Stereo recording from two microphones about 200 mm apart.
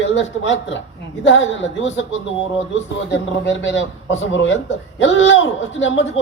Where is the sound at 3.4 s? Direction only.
65° left (ahead or behind).